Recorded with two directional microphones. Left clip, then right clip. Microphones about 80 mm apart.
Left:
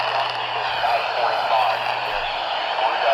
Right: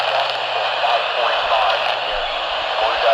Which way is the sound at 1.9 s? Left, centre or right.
Right.